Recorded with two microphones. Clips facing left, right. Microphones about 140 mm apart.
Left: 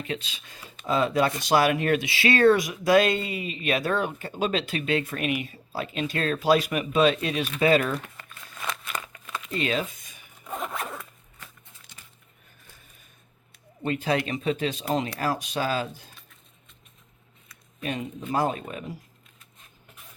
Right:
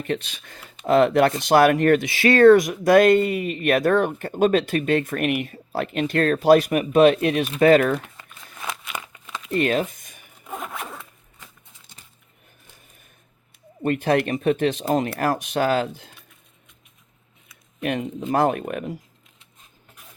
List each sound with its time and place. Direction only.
0.0 s speech: 55° right (ahead or behind)
9.5 s a sound: 55° right (ahead or behind)
10.5 s zipper: centre (ahead or behind)
13.8 s speech: 55° right (ahead or behind)
18.3 s speech: 60° right (ahead or behind)